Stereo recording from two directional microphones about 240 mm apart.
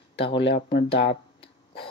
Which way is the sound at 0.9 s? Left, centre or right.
Left.